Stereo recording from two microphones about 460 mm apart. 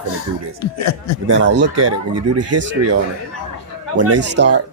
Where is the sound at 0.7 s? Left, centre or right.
Left.